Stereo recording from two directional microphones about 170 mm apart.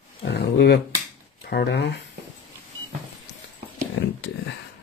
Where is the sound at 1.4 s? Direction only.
80° left.